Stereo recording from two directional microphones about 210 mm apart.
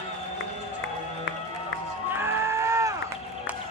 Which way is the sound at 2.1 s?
10° right (ahead or behind).